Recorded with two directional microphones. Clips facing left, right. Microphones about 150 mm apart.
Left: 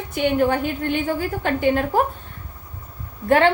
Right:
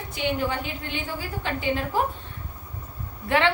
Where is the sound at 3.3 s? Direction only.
45° left (ahead or behind).